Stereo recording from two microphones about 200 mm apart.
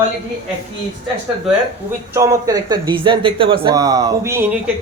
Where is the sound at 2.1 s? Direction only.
15° right (ahead or behind).